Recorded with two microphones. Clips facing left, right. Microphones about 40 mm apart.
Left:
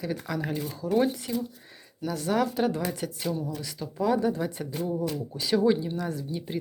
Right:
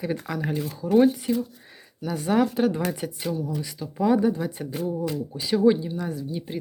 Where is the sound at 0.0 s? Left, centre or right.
Centre.